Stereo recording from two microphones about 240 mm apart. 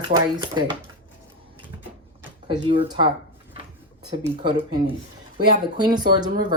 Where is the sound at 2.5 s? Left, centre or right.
Centre.